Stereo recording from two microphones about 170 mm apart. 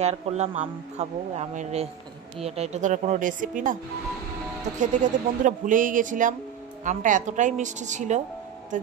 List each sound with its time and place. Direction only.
0.0 s speech: 40° right (ahead or behind)
4.7 s speech: 45° right (ahead or behind)